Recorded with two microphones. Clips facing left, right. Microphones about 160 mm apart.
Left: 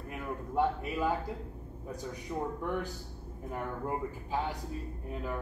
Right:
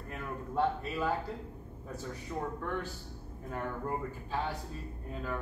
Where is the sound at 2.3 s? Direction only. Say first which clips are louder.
Left 2 dB; 15° left (ahead or behind).